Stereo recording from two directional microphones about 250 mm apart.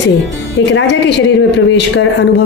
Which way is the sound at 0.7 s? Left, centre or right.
Left.